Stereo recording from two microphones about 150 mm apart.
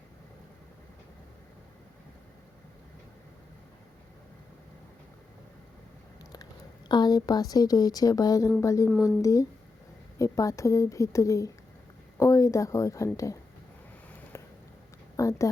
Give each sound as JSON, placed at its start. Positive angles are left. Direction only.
{"t": 6.3, "sound": "a woman's voice", "side_deg": 25}
{"t": 15.1, "sound": "speech", "side_deg": 20}